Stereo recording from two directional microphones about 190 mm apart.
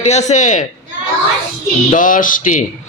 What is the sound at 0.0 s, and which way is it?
Speech, 35° left (ahead or behind).